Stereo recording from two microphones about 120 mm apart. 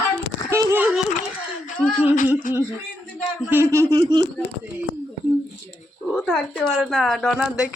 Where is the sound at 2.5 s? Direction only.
90° left.